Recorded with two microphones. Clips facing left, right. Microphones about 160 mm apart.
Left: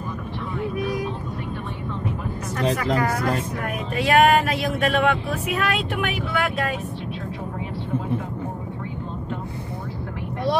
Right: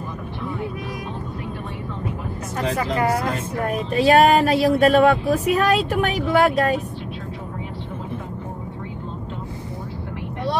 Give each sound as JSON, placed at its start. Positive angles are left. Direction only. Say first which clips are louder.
{"t": 2.7, "sound": "speech", "louder": "right 3 dB", "side_deg": -30}